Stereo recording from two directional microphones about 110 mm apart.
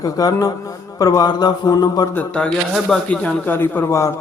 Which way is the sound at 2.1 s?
10° left (ahead or behind).